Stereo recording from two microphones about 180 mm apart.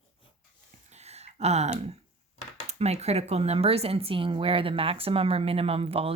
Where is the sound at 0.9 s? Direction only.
35° right (ahead or behind).